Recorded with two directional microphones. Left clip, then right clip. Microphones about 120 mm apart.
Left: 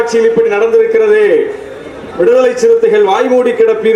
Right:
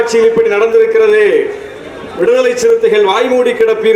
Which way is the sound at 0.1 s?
15° right (ahead or behind).